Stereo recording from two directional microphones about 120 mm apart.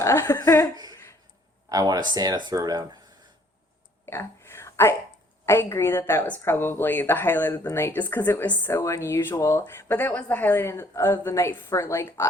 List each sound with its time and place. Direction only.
0.0 s speech: 25° left (ahead or behind)
1.7 s speech: 30° right (ahead or behind)
4.0 s a sound: 20° left (ahead or behind)
5.5 s speech: 20° left (ahead or behind)